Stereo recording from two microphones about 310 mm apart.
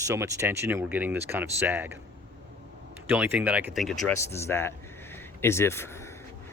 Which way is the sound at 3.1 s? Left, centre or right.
Centre.